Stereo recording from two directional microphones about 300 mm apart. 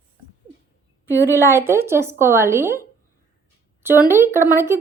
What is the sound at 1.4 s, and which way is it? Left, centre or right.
A woman's voice, centre.